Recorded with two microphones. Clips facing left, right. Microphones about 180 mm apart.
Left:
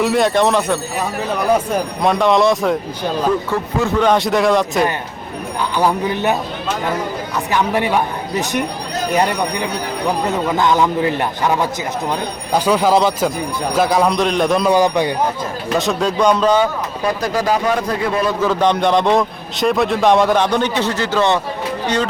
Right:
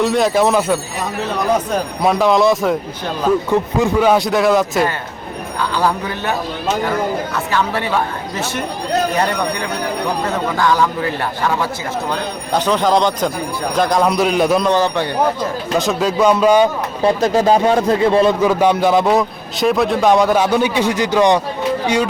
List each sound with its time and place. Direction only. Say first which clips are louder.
0.0 s a man's voice: even; centre (ahead or behind)
2.0 s a man's voice: right 1 dB; centre (ahead or behind)
3.5 s a man's voice: right 3 dB; 15° right (ahead or behind)
5.7 s speech: left 3 dB; 20° left (ahead or behind)
7.5 s speech: left 2 dB; 15° left (ahead or behind)
10.6 s a man's voice: left 1 dB; 20° left (ahead or behind)
12.5 s a man's voice: left 1 dB; 10° left (ahead or behind)
14.7 s speech: left 2 dB; 15° left (ahead or behind)
15.8 s a man's voice: right 1 dB; centre (ahead or behind)
17.0 s speech: right 5 dB; 25° right (ahead or behind)
18.4 s a man's voice: right 2 dB; 10° right (ahead or behind)